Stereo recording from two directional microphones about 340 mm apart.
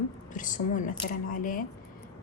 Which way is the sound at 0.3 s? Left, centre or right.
Left.